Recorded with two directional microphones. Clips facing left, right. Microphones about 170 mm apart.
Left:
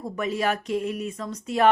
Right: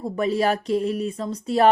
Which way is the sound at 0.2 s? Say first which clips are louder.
Right 4 dB; 35° right (ahead or behind).